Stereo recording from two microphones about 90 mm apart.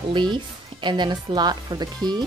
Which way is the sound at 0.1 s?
60° right (ahead or behind).